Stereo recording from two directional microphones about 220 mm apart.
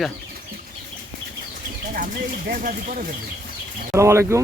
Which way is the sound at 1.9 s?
40° right (ahead or behind).